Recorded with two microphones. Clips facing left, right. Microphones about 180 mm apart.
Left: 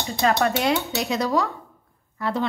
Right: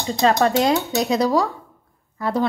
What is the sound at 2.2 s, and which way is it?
Speech, 40° right (ahead or behind).